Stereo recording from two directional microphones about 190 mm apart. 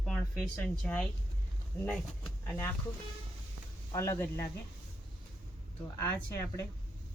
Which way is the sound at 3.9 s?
15° left (ahead or behind).